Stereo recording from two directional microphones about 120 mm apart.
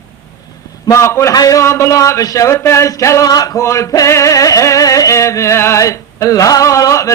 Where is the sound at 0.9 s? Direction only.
25° left (ahead or behind).